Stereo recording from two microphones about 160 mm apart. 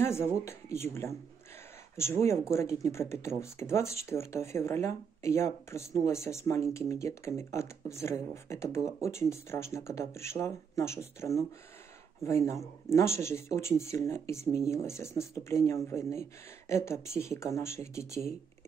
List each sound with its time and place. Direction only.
0.0 s speech: 15° left (ahead or behind)